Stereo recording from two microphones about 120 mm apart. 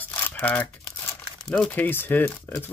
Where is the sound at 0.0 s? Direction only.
15° left (ahead or behind).